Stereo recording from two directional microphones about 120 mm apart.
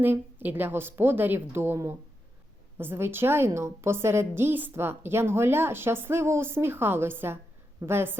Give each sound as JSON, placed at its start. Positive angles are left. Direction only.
{"t": 0.0, "sound": "a woman's voice", "side_deg": -15}